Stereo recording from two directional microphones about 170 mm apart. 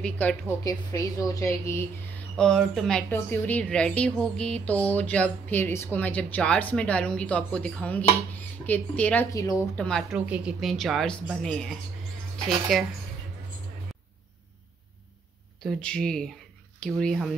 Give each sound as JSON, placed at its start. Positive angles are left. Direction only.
{"t": 0.0, "sound": "a woman's voice", "side_deg": 5}
{"t": 0.7, "sound": "a woman's voice", "side_deg": 20}
{"t": 2.3, "sound": "a woman's voice", "side_deg": 5}
{"t": 9.3, "sound": "a woman's voice", "side_deg": 20}
{"t": 9.8, "sound": "speech", "side_deg": 5}
{"t": 10.1, "sound": "speech", "side_deg": -5}
{"t": 15.6, "sound": "speech", "side_deg": 5}